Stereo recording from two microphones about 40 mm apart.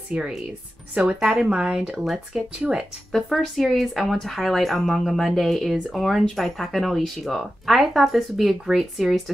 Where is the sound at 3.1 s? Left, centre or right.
Centre.